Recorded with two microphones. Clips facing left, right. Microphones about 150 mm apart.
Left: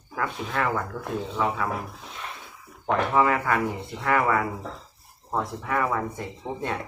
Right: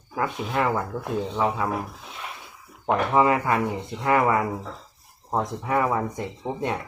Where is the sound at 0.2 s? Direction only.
20° right (ahead or behind).